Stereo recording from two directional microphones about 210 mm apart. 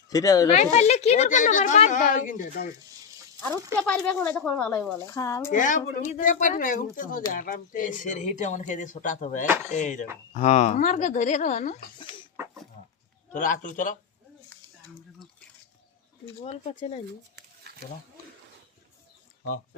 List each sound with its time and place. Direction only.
0.1 s speech: 15° left (ahead or behind)
0.5 s speech: 30° left (ahead or behind)
3.8 s speech: 5° left (ahead or behind)
5.5 s speech: 40° left (ahead or behind)
13.3 s speech: 40° left (ahead or behind)
16.4 s speech: 30° left (ahead or behind)
17.3 s a sound: 50° right (ahead or behind)